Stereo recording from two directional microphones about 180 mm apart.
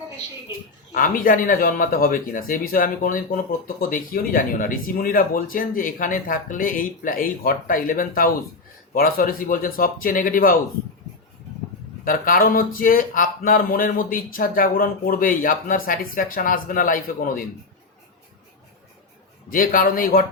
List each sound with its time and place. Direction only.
0.9 s speech: 50° left (ahead or behind)
12.0 s speech: 50° left (ahead or behind)
19.5 s speech: 50° left (ahead or behind)